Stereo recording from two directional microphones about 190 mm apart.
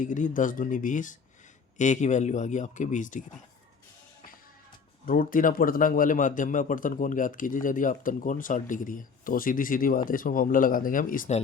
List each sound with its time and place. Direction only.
0.0 s a man's voice: 40° left (ahead or behind)
5.0 s a man's voice: 50° left (ahead or behind)